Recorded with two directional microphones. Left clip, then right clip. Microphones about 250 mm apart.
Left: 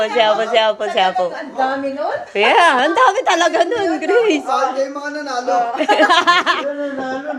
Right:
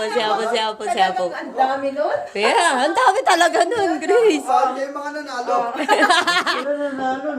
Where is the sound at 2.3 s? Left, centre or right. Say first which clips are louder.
Left 6 dB; centre.